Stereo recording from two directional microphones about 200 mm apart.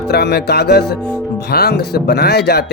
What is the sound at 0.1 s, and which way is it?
Speech, 55° left (ahead or behind).